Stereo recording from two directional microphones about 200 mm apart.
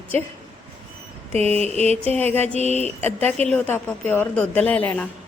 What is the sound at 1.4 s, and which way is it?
Mantra, 30° right (ahead or behind).